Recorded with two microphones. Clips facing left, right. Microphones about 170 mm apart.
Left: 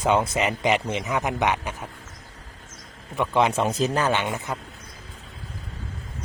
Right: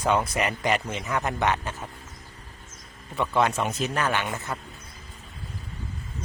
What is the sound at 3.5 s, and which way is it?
Speech, 30° left (ahead or behind).